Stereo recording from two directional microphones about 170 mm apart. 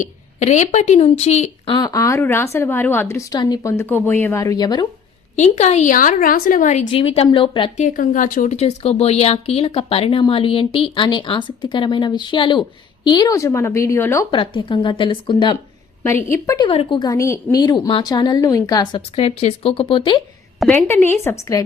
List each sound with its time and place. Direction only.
0.0 s speech: 45° left (ahead or behind)
1.7 s speech: 20° left (ahead or behind)
5.4 s a woman's voice: 40° left (ahead or behind)
7.8 s speech: 50° left (ahead or behind); by 14.3 s 15° left (ahead or behind)
14.3 s a woman's voice: 30° left (ahead or behind)
16.0 s speech: 15° left (ahead or behind)
16.6 s a woman's voice: 30° left (ahead or behind)
20.6 s a woman's voice: 10° left (ahead or behind)